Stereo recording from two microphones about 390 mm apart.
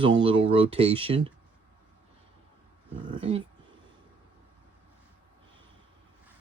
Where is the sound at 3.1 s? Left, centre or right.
Centre.